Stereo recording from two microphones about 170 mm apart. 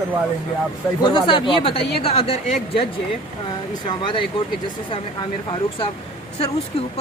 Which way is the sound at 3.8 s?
30° left (ahead or behind).